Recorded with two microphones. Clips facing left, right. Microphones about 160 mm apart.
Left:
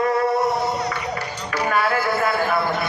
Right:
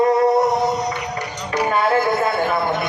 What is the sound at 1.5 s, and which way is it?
Music, 20° right (ahead or behind).